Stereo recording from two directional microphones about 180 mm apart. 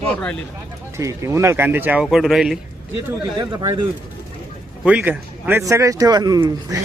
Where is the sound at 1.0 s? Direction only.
15° right (ahead or behind).